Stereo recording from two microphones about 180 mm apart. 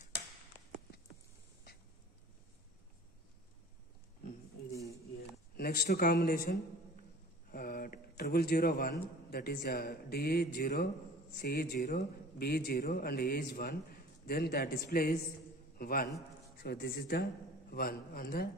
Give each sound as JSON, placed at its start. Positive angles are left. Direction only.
{"t": 5.6, "sound": "a man's voice", "side_deg": 60}